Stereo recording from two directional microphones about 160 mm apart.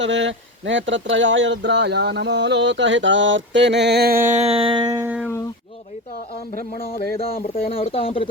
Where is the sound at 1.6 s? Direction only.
90° right.